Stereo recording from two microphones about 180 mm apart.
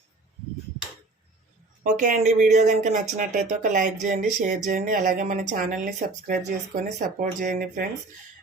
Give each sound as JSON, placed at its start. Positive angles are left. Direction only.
{"t": 1.8, "sound": "speech", "side_deg": -45}